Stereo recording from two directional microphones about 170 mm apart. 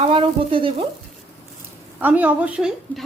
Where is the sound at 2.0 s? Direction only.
10° right (ahead or behind).